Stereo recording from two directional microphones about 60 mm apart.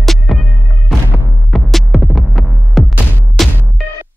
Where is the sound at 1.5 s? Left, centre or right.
Centre.